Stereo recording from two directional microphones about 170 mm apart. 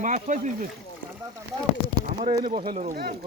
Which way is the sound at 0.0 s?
45° right (ahead or behind).